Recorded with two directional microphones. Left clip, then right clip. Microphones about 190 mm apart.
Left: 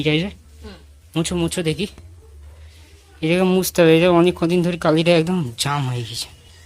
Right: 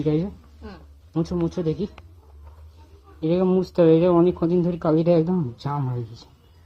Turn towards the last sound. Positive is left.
turn(degrees=15)  # may be behind; listen again after turning